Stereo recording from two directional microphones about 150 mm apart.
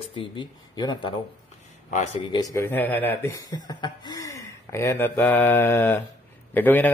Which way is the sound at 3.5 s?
25° left (ahead or behind).